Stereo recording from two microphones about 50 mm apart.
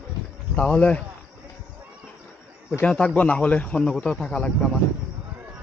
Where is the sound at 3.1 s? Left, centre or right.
Left.